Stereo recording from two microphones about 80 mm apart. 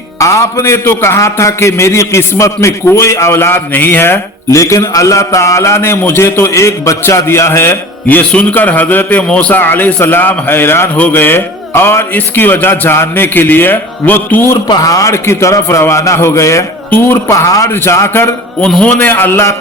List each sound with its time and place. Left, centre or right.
0.2 s a man's voice: left
14.8 s a man's voice: left
18.6 s a man's voice: centre